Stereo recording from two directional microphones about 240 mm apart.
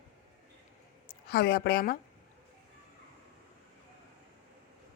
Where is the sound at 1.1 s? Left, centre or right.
Left.